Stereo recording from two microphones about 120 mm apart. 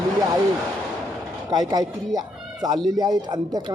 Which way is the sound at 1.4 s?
35° right (ahead or behind).